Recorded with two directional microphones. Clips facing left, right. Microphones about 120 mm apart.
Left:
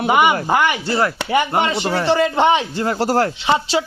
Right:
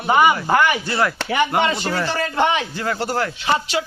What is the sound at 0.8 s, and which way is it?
Speech, 30° left (ahead or behind).